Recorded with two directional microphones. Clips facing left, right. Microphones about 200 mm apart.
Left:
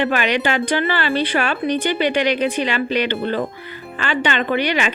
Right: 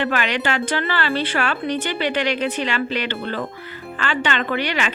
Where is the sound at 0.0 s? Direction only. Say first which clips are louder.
Left 3 dB; 15° left (ahead or behind).